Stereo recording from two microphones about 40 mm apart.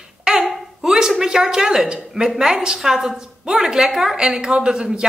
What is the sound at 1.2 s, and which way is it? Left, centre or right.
A woman's voice, centre.